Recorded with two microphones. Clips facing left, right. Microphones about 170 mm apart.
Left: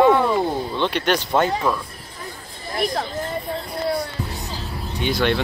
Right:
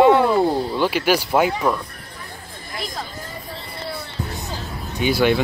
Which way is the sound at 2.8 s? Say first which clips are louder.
Left 8 dB; 60° left (ahead or behind).